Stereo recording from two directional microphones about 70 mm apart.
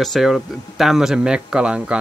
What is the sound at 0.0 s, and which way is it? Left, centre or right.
Speech, centre.